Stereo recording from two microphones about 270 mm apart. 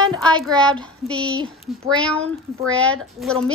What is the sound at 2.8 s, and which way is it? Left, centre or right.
Speech, centre.